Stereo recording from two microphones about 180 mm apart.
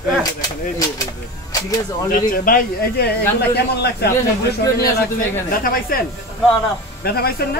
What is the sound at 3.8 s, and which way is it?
Speech, 60° left (ahead or behind).